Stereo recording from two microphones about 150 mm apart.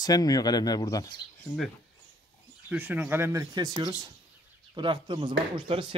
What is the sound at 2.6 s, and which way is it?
Speech, 10° right (ahead or behind).